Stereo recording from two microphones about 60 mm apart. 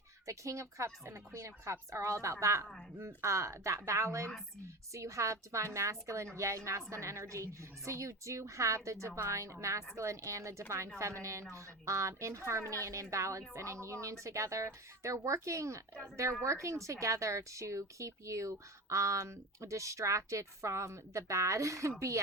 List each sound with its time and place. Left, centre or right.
0.3 s a woman's voice: right